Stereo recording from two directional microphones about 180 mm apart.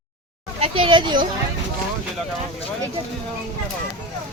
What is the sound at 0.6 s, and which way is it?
Speech, 30° right (ahead or behind).